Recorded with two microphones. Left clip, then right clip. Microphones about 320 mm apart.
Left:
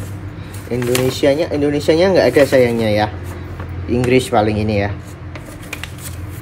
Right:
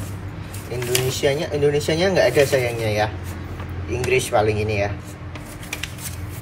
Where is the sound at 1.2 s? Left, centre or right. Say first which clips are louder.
Left 4 dB; left.